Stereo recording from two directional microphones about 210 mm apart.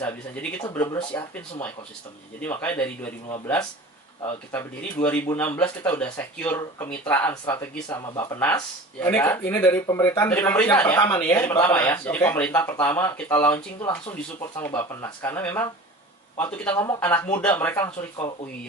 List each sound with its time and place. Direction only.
0.0 s speech: 10° left (ahead or behind)